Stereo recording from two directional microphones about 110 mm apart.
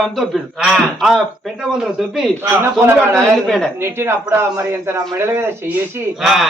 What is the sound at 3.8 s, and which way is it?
A man's voice, 20° right (ahead or behind).